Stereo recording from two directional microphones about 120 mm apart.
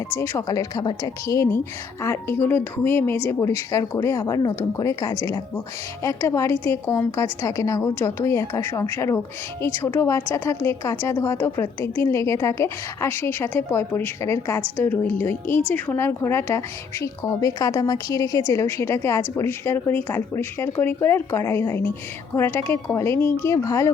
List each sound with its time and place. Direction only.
0.2 s a woman's voice: 25° left (ahead or behind)